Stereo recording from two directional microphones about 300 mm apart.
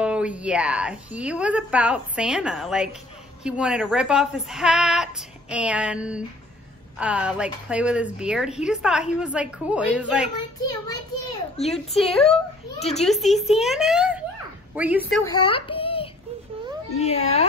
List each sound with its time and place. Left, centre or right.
0.0 s a woman's voice: centre
11.7 s a woman's voice: centre
15.3 s a sound: centre
16.9 s speech: left